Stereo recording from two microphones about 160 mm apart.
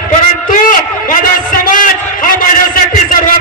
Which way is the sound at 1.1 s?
55° left (ahead or behind).